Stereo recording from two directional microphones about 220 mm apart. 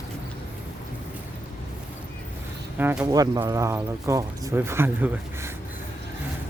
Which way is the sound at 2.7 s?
5° right (ahead or behind).